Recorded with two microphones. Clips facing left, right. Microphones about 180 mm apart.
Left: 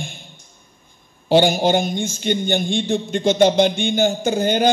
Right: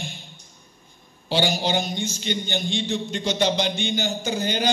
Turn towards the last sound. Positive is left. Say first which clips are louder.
# left 7 dB
turn(degrees=50)  # may be behind; listen again after turning